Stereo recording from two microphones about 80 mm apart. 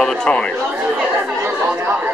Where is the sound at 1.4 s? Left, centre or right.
Right.